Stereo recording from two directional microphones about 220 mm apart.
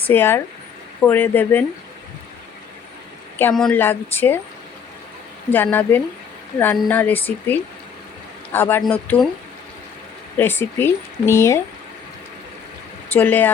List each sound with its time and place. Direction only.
0.0 s speech: 10° left (ahead or behind)
3.3 s speech: 5° left (ahead or behind)
5.5 s speech: 10° left (ahead or behind)
10.3 s speech: 10° left (ahead or behind)
13.1 s speech: 5° left (ahead or behind)